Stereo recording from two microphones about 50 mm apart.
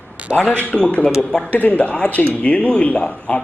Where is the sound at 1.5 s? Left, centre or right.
Left.